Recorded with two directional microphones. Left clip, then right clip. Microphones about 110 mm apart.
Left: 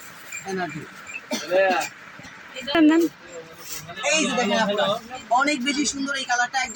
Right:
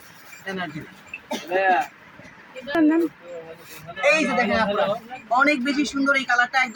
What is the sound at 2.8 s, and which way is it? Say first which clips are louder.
Speech: left 2 dB; 20° left (ahead or behind).